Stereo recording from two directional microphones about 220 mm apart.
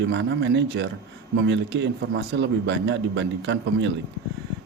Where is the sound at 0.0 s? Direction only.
55° right (ahead or behind).